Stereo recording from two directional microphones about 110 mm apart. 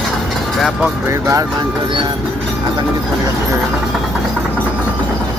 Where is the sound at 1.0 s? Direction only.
25° right (ahead or behind).